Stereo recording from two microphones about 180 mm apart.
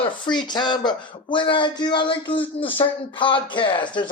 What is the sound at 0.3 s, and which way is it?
Speech, 25° left (ahead or behind).